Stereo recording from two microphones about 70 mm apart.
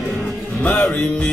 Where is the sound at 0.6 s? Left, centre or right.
Left.